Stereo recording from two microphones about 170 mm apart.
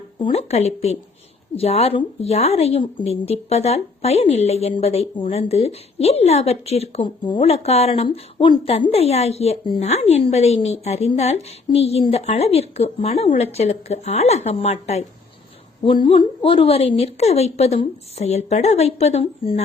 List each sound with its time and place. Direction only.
0.2 s a woman's voice: 35° left (ahead or behind)